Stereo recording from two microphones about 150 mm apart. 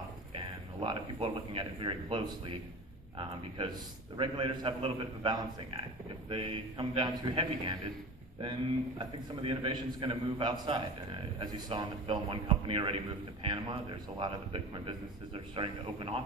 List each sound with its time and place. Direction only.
0.3 s a man's voice: 35° right (ahead or behind)